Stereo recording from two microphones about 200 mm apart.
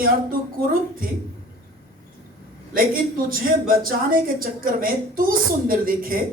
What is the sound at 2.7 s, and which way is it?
A woman's voice, 45° right (ahead or behind).